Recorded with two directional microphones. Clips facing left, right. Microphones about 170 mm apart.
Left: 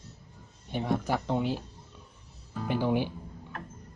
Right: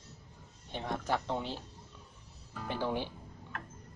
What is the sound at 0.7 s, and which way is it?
Speech, 10° left (ahead or behind).